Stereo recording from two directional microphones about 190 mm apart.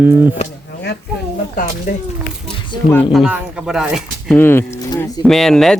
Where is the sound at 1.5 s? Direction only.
50° left (ahead or behind).